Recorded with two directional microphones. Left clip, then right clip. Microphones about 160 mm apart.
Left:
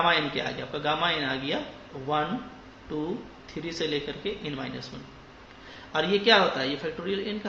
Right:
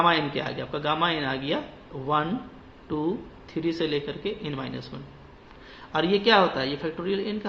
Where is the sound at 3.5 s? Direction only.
40° right (ahead or behind).